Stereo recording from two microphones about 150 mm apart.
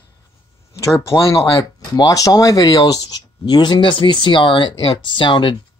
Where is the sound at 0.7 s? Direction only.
20° left (ahead or behind).